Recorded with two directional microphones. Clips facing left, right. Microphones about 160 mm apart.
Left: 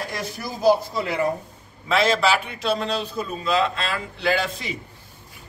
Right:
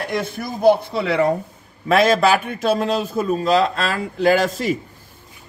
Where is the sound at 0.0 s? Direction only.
55° right (ahead or behind).